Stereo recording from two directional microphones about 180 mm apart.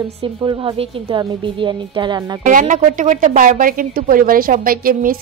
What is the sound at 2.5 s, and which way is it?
Speech, 45° right (ahead or behind).